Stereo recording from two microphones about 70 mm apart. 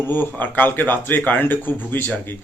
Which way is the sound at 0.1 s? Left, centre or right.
Left.